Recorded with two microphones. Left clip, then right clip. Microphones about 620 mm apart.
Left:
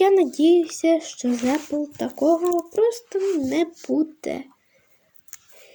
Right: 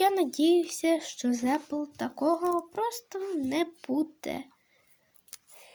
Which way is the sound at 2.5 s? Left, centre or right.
Right.